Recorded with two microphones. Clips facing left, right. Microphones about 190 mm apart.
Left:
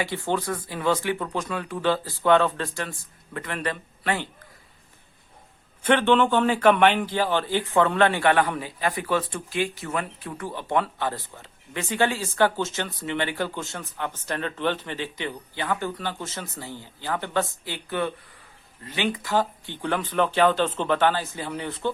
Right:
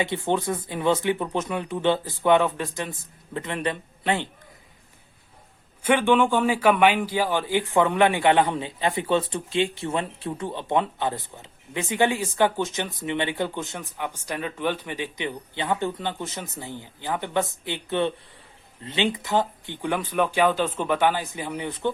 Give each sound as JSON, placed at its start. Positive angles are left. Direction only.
{"t": 0.0, "sound": "speech", "side_deg": -20}
{"t": 5.8, "sound": "a man's voice", "side_deg": -10}